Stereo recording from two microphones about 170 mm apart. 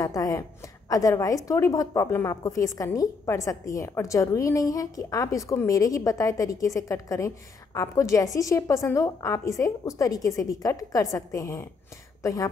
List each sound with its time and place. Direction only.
0.0 s a woman's voice: 20° left (ahead or behind)